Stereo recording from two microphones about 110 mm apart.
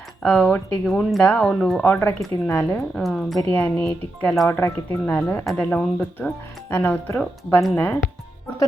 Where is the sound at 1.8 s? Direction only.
20° left (ahead or behind).